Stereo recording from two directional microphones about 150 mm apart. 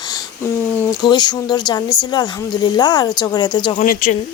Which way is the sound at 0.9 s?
30° left (ahead or behind).